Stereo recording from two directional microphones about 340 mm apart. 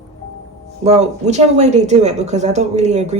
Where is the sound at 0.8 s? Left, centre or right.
Centre.